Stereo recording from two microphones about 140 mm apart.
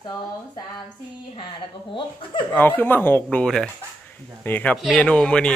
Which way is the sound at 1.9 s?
35° left (ahead or behind).